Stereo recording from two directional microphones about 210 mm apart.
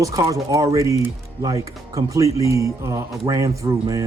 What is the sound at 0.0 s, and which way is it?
Speech, 15° right (ahead or behind).